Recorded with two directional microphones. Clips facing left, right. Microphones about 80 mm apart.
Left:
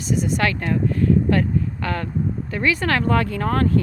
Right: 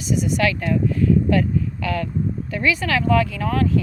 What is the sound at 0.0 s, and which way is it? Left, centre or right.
Speech, left.